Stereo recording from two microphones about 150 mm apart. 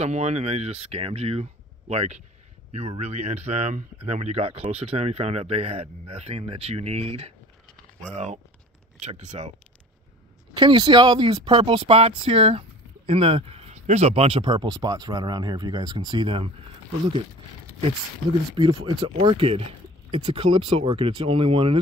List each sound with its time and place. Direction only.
0.0 s speech: 45° right (ahead or behind)
10.5 s speech: 30° right (ahead or behind)
18.8 s speech: 35° right (ahead or behind)